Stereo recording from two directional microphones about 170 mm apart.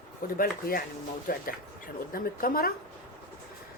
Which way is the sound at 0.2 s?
55° left (ahead or behind).